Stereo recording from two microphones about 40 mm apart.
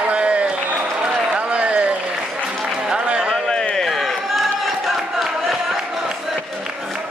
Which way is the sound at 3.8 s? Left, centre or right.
Centre.